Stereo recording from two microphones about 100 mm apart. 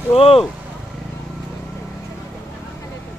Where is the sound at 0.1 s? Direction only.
75° left (ahead or behind).